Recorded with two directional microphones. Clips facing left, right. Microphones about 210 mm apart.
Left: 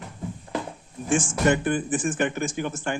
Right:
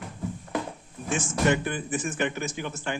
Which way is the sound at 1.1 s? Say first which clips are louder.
Left 3 dB; 50° left (ahead or behind).